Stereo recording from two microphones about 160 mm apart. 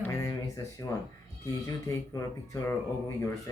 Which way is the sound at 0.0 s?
20° left (ahead or behind).